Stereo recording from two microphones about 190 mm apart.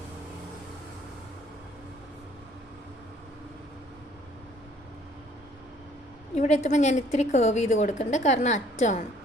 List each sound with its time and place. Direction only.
6.3 s a woman's voice: 35° left (ahead or behind)